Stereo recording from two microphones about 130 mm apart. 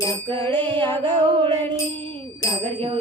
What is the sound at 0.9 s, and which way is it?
Music, 40° right (ahead or behind).